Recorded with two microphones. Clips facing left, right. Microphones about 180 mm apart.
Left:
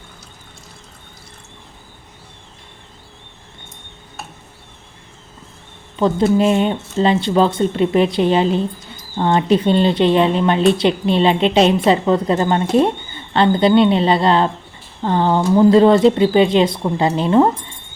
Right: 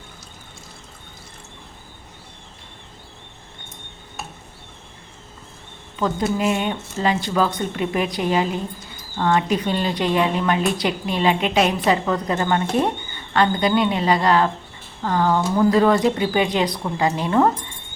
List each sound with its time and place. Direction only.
6.0 s speech: 30° left (ahead or behind)